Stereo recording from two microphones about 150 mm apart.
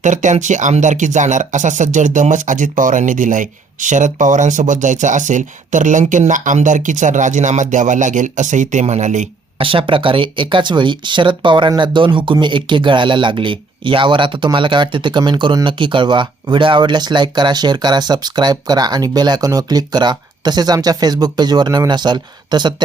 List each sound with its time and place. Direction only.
0.0 s speech: 55° right (ahead or behind)
9.6 s speech: 35° right (ahead or behind)